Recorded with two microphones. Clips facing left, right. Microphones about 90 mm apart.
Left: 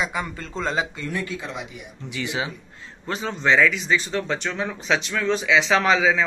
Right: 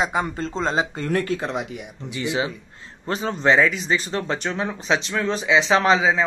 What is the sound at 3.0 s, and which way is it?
Speech, 35° right (ahead or behind).